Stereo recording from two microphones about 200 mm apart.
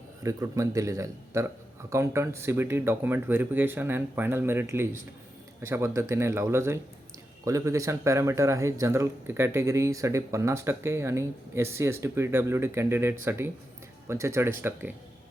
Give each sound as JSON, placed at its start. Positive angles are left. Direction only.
{"t": 0.2, "sound": "speech", "side_deg": -15}